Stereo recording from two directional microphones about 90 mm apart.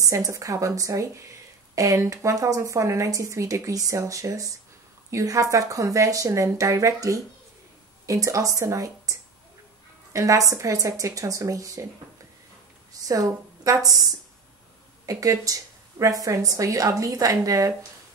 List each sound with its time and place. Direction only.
0.0 s speech: 40° right (ahead or behind)
12.9 s a woman's voice: 40° right (ahead or behind)
15.0 s speech: 40° right (ahead or behind)